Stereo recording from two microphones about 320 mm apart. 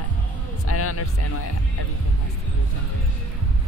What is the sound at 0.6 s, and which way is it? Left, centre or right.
Speech, left.